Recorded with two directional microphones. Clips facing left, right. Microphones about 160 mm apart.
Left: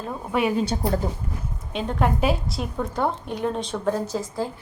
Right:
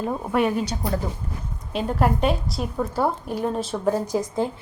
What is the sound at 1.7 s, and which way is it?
A woman's voice, 5° right (ahead or behind).